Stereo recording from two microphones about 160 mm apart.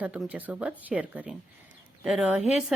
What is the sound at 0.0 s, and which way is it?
A woman's voice, 10° right (ahead or behind).